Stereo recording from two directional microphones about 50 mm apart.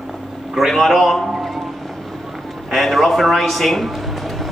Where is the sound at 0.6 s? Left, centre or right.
Centre.